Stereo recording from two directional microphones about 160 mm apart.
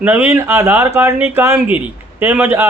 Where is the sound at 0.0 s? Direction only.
10° right (ahead or behind).